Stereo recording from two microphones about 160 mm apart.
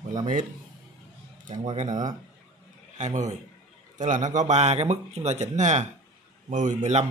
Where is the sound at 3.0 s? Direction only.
50° right (ahead or behind).